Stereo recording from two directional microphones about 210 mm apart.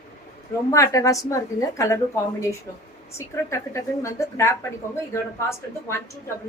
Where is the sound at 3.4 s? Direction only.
15° left (ahead or behind).